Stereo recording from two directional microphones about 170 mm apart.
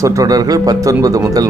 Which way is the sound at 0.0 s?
20° right (ahead or behind).